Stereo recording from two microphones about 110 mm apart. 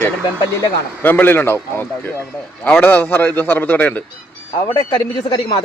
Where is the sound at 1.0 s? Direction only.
15° left (ahead or behind).